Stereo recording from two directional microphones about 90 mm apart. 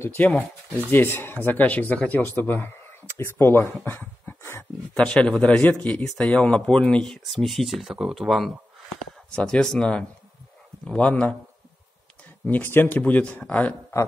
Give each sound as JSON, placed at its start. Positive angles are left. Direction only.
{"t": 0.2, "sound": "a man's voice", "side_deg": 15}
{"t": 3.8, "sound": "dog", "side_deg": 25}
{"t": 4.9, "sound": "a man's voice", "side_deg": 10}
{"t": 9.3, "sound": "a man's voice", "side_deg": 10}
{"t": 12.4, "sound": "a man's voice", "side_deg": 20}